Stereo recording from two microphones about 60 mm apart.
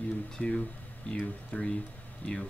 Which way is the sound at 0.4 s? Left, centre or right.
Centre.